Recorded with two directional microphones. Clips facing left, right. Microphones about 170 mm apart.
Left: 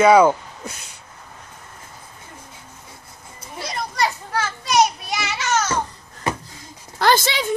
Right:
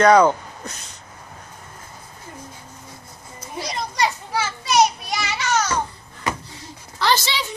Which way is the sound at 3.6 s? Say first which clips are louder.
Even; 15° right (ahead or behind).